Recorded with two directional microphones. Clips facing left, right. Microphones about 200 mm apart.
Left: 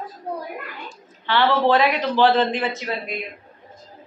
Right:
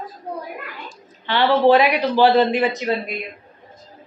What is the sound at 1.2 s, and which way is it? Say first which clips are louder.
A woman's voice: right 3 dB; 15° right (ahead or behind).